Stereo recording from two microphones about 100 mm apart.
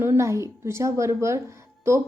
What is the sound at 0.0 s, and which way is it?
A woman's voice, 25° right (ahead or behind).